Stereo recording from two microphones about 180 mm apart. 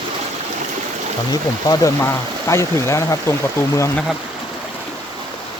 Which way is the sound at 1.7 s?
15° left (ahead or behind).